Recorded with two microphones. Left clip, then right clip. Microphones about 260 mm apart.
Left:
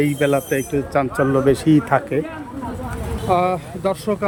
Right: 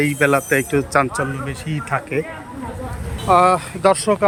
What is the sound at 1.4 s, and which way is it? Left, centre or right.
Speech, centre.